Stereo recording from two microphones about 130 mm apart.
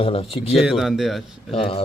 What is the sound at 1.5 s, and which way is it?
Speech, 45° left (ahead or behind).